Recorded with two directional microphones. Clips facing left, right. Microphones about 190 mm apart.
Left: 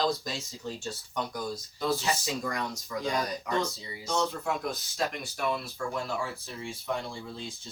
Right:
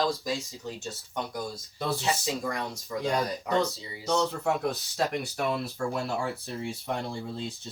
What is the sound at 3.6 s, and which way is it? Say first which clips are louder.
Speech: right 5 dB; 65° right (ahead or behind).